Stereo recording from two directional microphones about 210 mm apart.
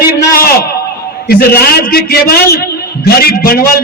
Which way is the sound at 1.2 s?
45° left (ahead or behind).